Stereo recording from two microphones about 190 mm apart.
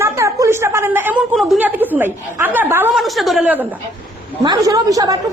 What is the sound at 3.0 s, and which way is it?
Speech, centre (ahead or behind).